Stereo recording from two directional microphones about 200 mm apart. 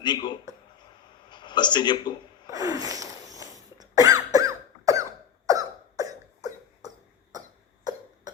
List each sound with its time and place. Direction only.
0.0 s a man's voice: 20° left (ahead or behind)
2.5 s a sound: 20° right (ahead or behind)
3.8 s cough: 15° right (ahead or behind)